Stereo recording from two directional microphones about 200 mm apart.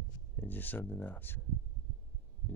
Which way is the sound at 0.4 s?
10° left (ahead or behind).